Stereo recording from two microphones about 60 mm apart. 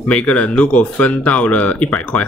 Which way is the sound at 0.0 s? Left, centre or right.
Centre.